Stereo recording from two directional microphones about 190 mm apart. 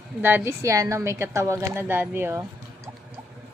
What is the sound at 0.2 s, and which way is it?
A woman's voice, 10° right (ahead or behind).